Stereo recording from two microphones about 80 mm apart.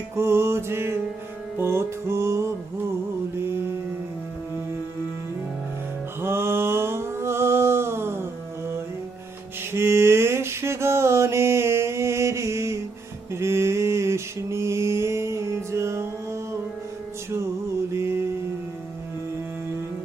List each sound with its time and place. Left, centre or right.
0.2 s music: right
3.3 s mantra: right
6.2 s a sound: right
9.7 s mantra: right
17.9 s mantra: right